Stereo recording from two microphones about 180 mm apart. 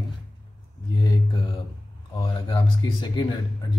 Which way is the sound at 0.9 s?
25° left (ahead or behind).